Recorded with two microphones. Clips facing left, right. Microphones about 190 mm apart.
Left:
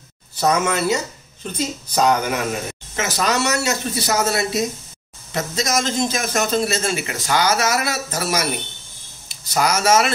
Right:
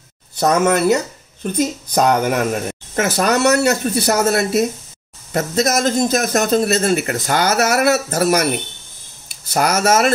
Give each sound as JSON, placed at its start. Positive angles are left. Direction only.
{"t": 0.4, "sound": "speech", "side_deg": -55}